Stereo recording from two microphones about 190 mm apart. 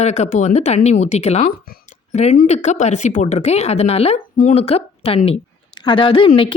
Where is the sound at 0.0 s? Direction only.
35° left (ahead or behind).